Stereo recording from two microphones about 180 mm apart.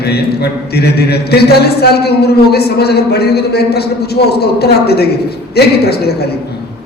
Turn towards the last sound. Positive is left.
turn(degrees=65)  # may be behind; listen again after turning